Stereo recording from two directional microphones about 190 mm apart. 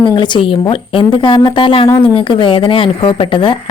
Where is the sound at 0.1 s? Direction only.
25° left (ahead or behind).